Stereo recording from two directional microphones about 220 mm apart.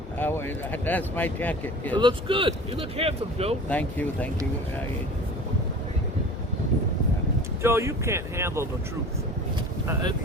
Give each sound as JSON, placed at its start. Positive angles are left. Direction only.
{"t": 0.2, "sound": "speech", "side_deg": 10}
{"t": 2.0, "sound": "speech", "side_deg": -20}
{"t": 3.7, "sound": "speech", "side_deg": 5}
{"t": 7.6, "sound": "speech", "side_deg": -10}